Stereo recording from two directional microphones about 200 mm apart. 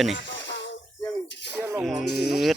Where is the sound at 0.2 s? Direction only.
65° left (ahead or behind).